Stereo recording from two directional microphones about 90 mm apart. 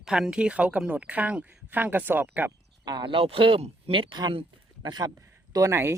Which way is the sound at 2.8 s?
50° right (ahead or behind).